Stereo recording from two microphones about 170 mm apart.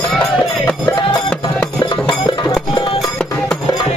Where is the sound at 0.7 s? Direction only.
10° left (ahead or behind).